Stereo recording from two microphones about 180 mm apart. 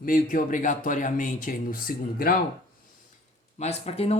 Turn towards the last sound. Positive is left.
turn(degrees=35)  # may be behind; listen again after turning